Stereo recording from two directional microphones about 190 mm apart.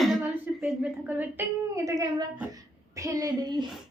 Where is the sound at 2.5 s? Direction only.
15° right (ahead or behind).